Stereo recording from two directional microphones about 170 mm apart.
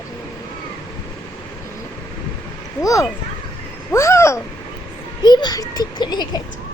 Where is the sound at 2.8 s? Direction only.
20° left (ahead or behind).